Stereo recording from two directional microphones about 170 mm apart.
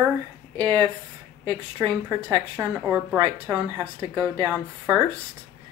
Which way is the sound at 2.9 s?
15° right (ahead or behind).